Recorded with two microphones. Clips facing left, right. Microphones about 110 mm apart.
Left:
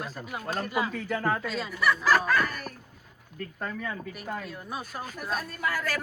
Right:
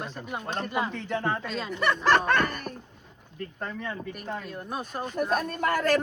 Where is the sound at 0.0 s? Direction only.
5° left (ahead or behind).